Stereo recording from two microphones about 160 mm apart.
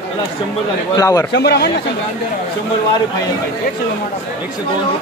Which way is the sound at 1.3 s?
90° left.